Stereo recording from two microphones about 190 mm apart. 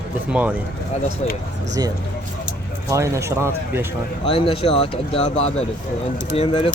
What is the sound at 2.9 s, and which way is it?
Speech, 15° right (ahead or behind).